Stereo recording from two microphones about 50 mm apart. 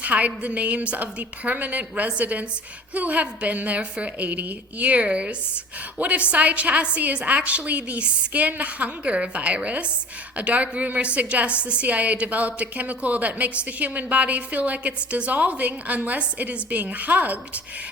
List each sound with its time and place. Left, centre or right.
0.0 s a woman's voice: right